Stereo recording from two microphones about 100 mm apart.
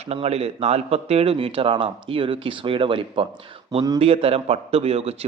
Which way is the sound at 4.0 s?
75° right (ahead or behind).